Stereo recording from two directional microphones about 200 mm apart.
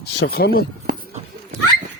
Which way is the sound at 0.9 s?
45° right (ahead or behind).